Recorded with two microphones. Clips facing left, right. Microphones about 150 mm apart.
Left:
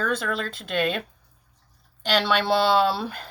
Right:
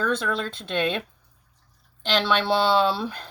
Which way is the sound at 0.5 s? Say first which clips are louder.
Even; 5° left (ahead or behind).